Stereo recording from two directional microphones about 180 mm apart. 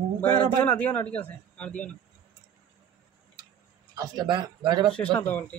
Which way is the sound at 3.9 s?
20° right (ahead or behind).